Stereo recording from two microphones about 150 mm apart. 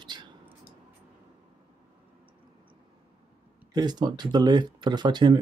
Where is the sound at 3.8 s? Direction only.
30° right (ahead or behind).